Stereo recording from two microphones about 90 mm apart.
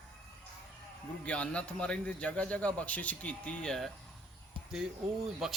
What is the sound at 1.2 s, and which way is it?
A man's voice, 15° left (ahead or behind).